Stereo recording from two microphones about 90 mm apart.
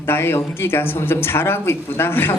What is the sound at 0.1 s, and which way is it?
Speech, 25° left (ahead or behind).